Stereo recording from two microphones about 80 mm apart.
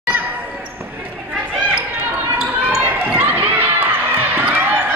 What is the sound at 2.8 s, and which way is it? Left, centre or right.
Basketball bounce, right.